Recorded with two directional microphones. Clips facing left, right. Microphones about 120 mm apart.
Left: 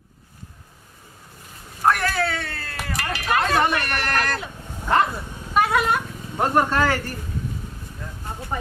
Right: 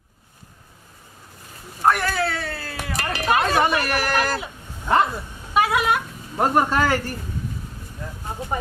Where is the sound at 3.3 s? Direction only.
5° right (ahead or behind).